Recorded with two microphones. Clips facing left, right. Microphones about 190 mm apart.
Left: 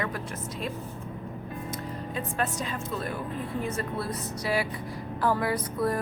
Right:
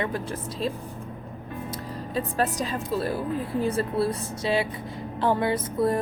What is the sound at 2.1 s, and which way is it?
A woman's voice, 35° right (ahead or behind).